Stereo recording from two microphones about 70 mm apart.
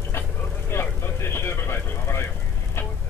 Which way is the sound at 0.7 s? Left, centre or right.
Left.